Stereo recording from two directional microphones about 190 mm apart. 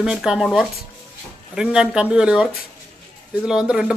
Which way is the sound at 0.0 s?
5° right (ahead or behind).